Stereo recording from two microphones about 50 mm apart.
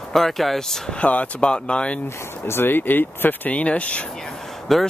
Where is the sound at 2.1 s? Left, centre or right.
Left.